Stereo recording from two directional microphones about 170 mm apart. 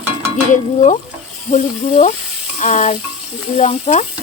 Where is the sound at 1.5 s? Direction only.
45° left (ahead or behind).